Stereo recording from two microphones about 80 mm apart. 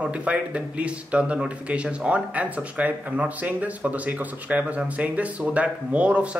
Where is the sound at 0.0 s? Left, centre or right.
Centre.